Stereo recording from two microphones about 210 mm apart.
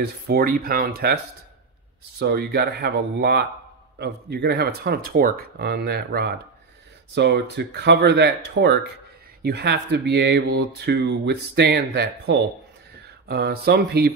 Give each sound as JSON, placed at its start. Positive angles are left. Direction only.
{"t": 0.0, "sound": "speech", "side_deg": -45}